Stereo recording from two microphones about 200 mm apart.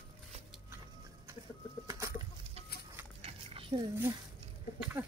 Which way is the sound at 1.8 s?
15° right (ahead or behind).